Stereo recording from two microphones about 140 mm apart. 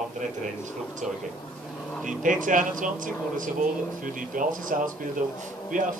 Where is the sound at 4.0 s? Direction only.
75° right (ahead or behind).